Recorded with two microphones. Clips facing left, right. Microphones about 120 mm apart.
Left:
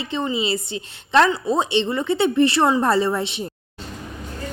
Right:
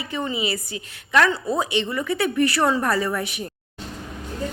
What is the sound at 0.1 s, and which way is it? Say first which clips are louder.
A woman's voice: left 3 dB; 25° left (ahead or behind).